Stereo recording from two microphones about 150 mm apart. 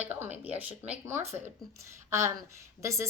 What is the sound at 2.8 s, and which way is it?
Speech, 20° right (ahead or behind).